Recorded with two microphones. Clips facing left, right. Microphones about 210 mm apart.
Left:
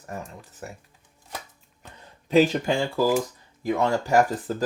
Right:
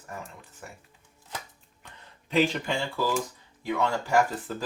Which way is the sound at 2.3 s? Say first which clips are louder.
Left 6 dB; 40° left (ahead or behind).